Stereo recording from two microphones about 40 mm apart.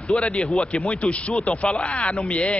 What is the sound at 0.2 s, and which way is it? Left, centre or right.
A man's voice, centre.